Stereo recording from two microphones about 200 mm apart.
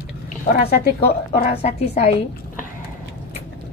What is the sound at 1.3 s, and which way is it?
Speech, 30° left (ahead or behind).